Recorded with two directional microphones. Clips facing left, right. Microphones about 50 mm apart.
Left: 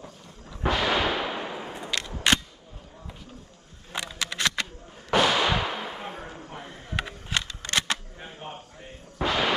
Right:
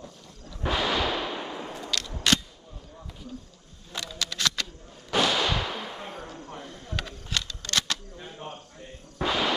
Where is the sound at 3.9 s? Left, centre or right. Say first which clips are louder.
Left 2 dB; left.